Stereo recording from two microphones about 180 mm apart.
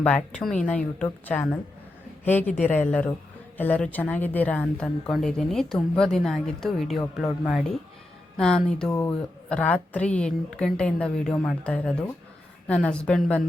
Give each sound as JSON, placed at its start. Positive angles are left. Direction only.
{"t": 0.0, "sound": "a woman's voice", "side_deg": 5}